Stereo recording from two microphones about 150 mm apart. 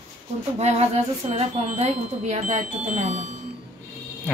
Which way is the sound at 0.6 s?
45° right (ahead or behind).